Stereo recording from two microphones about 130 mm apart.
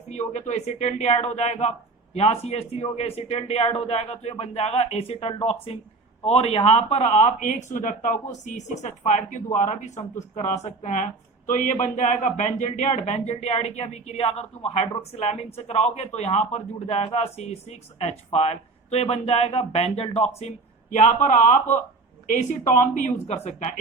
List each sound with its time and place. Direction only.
0.1 s speech: 65° left (ahead or behind)
20.9 s speech: 70° left (ahead or behind)
22.3 s speech: 80° left; by 23.8 s 65° left (ahead or behind)